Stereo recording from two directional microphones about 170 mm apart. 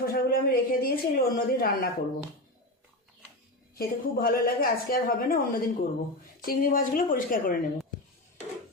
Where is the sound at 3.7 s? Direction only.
60° left (ahead or behind).